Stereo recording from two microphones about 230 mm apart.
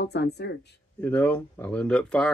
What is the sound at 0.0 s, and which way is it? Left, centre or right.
Speech, left.